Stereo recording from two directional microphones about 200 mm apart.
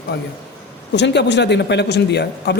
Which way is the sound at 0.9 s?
60° left (ahead or behind).